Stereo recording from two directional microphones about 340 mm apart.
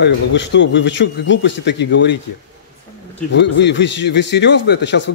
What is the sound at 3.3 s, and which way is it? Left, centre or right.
A man's voice, left.